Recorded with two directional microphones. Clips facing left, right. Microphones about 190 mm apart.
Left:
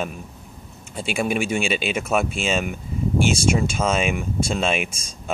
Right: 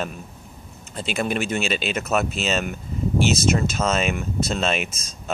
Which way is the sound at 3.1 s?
50° left (ahead or behind).